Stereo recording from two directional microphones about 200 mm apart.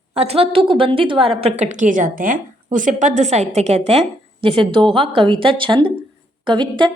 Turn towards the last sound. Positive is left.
turn(degrees=-25)  # may be behind; listen again after turning